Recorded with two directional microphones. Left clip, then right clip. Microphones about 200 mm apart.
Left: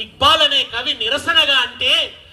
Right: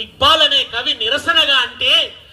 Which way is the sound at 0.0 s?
30° left (ahead or behind).